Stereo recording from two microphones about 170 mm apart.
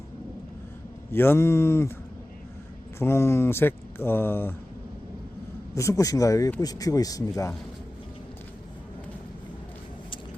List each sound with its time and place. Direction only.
1.1 s speech: 15° left (ahead or behind)
3.0 s speech: 15° left (ahead or behind)
5.7 s speech: 20° left (ahead or behind)